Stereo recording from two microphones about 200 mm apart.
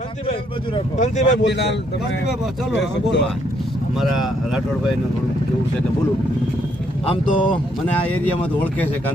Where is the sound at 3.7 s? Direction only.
Centre (ahead or behind).